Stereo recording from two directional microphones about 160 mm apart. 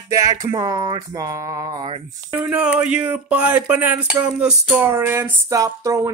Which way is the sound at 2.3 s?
10° right (ahead or behind).